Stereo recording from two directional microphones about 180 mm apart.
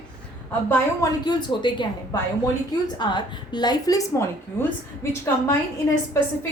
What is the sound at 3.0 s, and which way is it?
A woman's voice, 25° left (ahead or behind).